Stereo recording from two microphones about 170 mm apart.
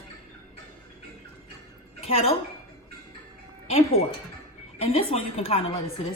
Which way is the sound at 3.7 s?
35° left (ahead or behind).